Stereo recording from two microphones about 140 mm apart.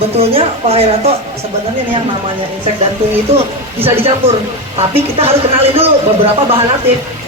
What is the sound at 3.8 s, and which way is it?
Speech, 45° right (ahead or behind).